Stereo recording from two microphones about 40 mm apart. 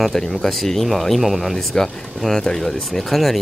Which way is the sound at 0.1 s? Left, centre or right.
Centre.